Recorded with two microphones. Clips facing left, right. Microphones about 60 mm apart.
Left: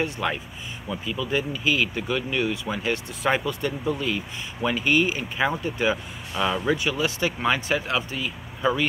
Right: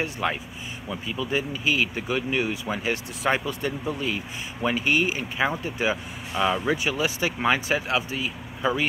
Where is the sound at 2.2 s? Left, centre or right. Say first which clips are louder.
Right 1 dB; right.